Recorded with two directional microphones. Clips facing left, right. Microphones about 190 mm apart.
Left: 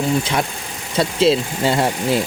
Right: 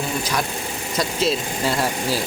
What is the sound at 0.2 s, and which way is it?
Speech, 25° left (ahead or behind).